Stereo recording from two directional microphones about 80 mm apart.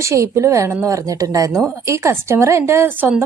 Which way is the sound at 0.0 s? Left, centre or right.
Right.